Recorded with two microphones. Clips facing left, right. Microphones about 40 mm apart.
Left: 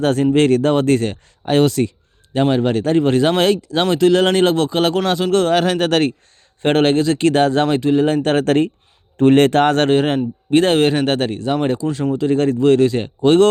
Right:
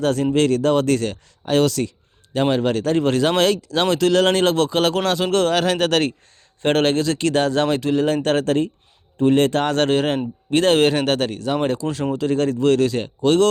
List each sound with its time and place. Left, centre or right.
0.0 s speech: left
2.4 s speech: centre
8.4 s speech: left
9.9 s speech: centre
12.3 s speech: centre
13.2 s speech: left